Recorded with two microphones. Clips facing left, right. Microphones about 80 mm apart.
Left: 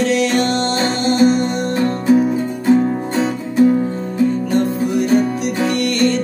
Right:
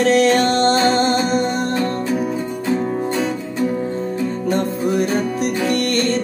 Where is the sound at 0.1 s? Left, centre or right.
Right.